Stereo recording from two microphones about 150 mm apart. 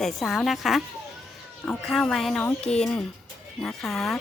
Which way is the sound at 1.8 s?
5° left (ahead or behind).